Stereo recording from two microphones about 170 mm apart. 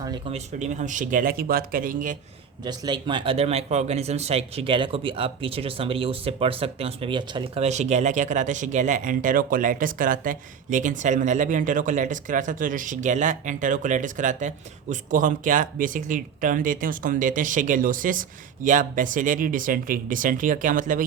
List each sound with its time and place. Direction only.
0.3 s speech: 40° right (ahead or behind)
2.6 s speech: 25° right (ahead or behind); by 21.0 s 50° right (ahead or behind)